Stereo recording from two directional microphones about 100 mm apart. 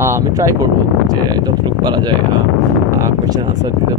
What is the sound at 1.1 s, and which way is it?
Speech, 45° right (ahead or behind).